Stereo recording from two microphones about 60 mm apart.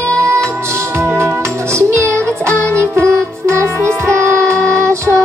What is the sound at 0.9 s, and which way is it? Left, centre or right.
Music, right.